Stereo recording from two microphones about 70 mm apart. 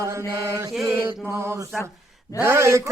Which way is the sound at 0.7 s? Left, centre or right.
Centre.